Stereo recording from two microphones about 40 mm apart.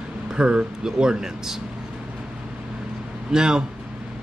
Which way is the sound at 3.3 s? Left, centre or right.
Centre.